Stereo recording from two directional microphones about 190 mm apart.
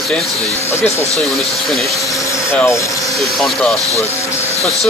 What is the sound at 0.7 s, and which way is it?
Speech, 15° left (ahead or behind).